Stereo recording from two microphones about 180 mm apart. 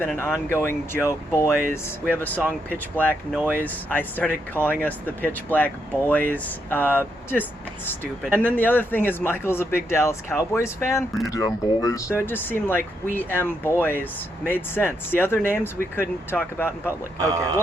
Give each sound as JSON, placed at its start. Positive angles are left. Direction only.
{"t": 0.0, "sound": "speech", "side_deg": 10}
{"t": 2.6, "sound": "speech", "side_deg": 10}
{"t": 17.2, "sound": "speech", "side_deg": -20}